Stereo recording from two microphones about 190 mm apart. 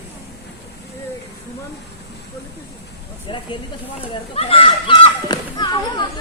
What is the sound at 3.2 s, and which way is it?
A child's voice, 25° left (ahead or behind).